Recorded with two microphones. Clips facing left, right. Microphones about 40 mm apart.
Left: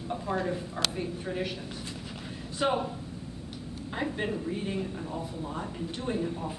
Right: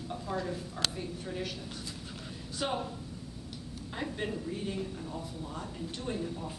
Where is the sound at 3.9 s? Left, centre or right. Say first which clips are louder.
Left 4 dB; centre.